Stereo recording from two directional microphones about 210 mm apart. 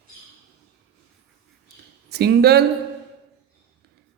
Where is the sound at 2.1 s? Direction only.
50° right (ahead or behind).